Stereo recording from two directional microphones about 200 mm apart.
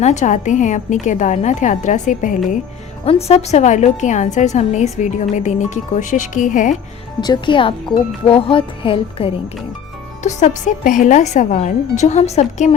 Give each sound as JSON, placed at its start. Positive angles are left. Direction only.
{"t": 0.0, "sound": "a woman's voice", "side_deg": 35}
{"t": 7.2, "sound": "a woman's voice", "side_deg": 20}